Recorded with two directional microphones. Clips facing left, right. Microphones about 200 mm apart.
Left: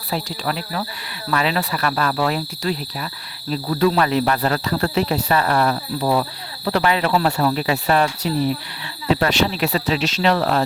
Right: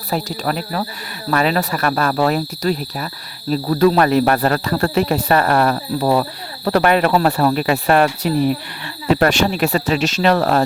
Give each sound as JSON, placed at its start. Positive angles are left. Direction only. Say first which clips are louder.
{"t": 0.1, "sound": "speech", "louder": "right 4 dB", "side_deg": -45}